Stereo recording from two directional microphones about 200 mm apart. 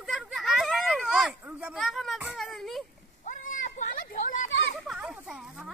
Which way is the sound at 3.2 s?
40° left (ahead or behind).